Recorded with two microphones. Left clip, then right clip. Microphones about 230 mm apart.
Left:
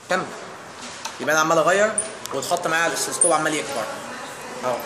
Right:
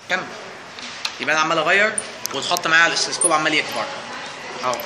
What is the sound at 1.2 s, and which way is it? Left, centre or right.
Speech, left.